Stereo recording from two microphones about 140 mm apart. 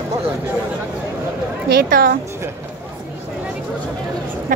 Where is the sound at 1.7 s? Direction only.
85° right.